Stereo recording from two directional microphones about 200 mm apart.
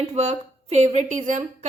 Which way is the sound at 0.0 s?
35° right (ahead or behind).